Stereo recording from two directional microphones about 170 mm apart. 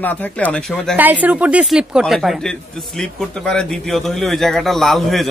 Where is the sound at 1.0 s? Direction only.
10° right (ahead or behind).